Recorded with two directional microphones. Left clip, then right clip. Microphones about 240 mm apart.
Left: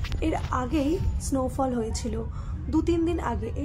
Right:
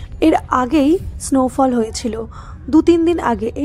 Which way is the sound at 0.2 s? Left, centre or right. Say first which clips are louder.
Right 14 dB; right.